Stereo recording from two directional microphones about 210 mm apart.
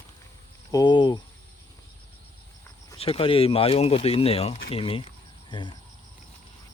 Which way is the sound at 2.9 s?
25° left (ahead or behind).